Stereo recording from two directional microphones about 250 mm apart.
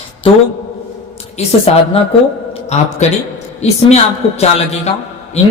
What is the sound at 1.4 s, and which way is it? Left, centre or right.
A man's voice, left.